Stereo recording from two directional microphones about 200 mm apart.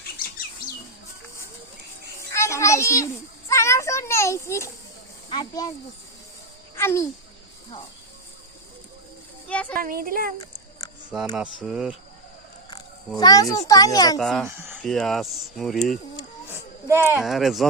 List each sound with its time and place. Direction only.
2.3 s a child's voice: 15° left (ahead or behind)
6.7 s speech: 15° left (ahead or behind)
9.5 s a child's voice: 5° left (ahead or behind)
9.7 s speech: 45° right (ahead or behind)
11.3 s speech: centre (ahead or behind)
13.1 s a child's voice: 20° left (ahead or behind)
14.2 s speech: centre (ahead or behind)
14.4 s speech: 10° right (ahead or behind)
14.8 s speech: centre (ahead or behind)
17.1 s speech: 5° right (ahead or behind)